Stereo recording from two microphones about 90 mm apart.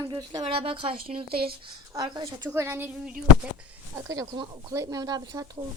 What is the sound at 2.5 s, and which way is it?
Speech, 25° right (ahead or behind).